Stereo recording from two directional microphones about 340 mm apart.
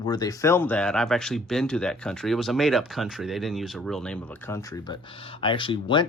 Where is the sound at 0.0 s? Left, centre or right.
Centre.